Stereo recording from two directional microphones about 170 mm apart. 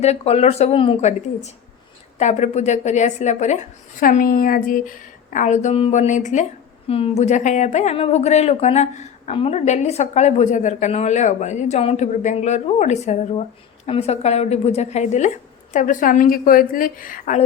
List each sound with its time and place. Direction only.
0.0 s a woman's voice: 40° left (ahead or behind)
4.0 s a woman's voice: 55° left (ahead or behind)
6.8 s a woman's voice: 35° left (ahead or behind); by 17.4 s 50° left (ahead or behind)